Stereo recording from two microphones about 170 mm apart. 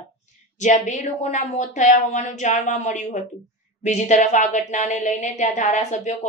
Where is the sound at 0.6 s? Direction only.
50° left (ahead or behind).